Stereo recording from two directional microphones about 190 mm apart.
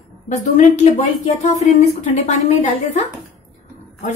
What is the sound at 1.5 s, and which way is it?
A woman's voice, 35° left (ahead or behind).